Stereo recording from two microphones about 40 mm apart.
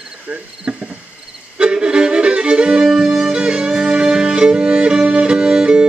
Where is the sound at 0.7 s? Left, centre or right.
Right.